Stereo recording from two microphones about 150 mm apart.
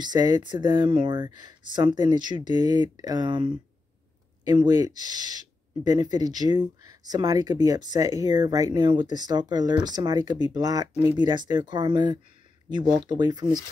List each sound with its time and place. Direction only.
0.0 s speech: 25° right (ahead or behind)